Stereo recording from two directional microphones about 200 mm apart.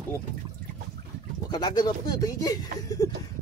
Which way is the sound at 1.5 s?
20° left (ahead or behind).